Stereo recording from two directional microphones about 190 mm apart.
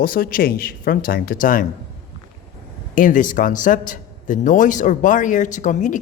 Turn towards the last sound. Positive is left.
turn(degrees=40)  # may be behind; listen again after turning